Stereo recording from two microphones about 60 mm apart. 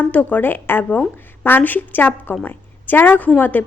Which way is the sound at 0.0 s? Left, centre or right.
Left.